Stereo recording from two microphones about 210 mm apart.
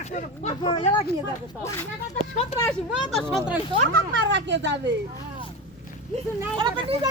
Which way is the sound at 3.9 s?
60° right (ahead or behind).